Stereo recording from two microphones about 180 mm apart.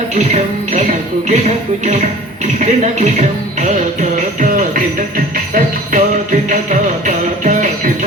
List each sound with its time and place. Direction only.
0.2 s music: 40° right (ahead or behind)
1.3 s speech: 40° right (ahead or behind)
4.4 s music: 45° right (ahead or behind)